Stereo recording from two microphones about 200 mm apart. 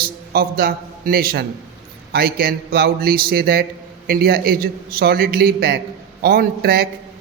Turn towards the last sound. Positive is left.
turn(degrees=-50)  # may be behind; listen again after turning